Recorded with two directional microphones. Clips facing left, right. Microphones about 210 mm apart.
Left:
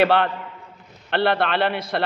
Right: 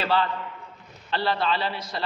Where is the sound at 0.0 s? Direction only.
60° left (ahead or behind).